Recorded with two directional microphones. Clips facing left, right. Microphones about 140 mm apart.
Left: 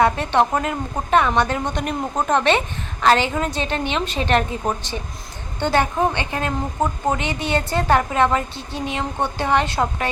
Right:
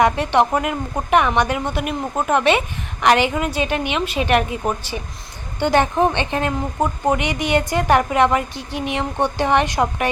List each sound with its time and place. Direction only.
0.0 s a woman's voice: 15° right (ahead or behind)